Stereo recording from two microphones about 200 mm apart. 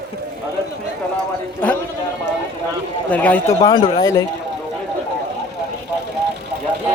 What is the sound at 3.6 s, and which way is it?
Speech, 20° left (ahead or behind).